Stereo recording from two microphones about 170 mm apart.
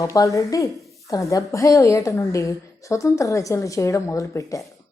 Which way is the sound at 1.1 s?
20° left (ahead or behind).